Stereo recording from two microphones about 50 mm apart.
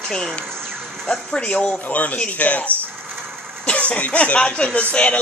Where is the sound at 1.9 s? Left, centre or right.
Left.